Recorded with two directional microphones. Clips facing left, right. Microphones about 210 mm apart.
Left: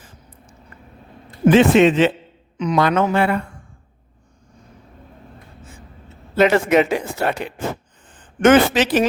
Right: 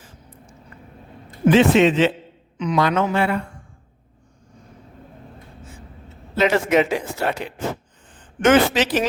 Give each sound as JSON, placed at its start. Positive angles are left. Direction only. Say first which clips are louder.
{"t": 1.5, "sound": "speech", "louder": "left 2 dB", "side_deg": 50}
{"t": 6.3, "sound": "speech", "louder": "left 3 dB", "side_deg": 55}